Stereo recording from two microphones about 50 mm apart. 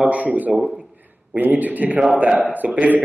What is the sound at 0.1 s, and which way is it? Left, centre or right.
A man's voice, right.